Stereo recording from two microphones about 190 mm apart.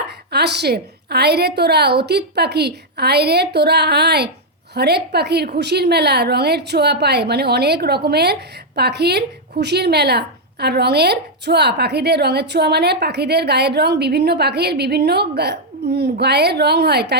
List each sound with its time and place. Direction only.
0.3 s a woman's voice: 60° right (ahead or behind)